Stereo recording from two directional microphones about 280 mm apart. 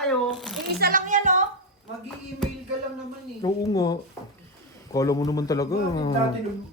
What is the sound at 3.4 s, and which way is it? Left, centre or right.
Speech, centre.